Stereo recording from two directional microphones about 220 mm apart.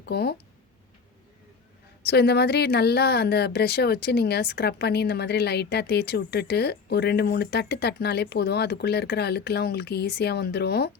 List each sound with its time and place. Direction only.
0.0 s speech: 45° left (ahead or behind)
2.0 s speech: 45° left (ahead or behind)